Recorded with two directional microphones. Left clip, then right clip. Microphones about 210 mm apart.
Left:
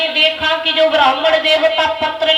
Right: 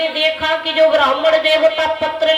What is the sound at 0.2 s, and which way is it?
A man's voice, 30° right (ahead or behind).